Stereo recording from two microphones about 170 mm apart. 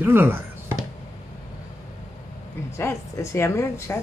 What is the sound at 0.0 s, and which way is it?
Chopping, 10° right (ahead or behind).